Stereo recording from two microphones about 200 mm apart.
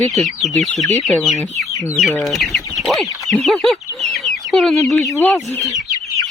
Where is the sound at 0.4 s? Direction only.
Centre (ahead or behind).